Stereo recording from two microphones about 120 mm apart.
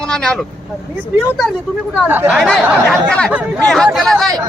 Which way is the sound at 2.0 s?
15° right (ahead or behind).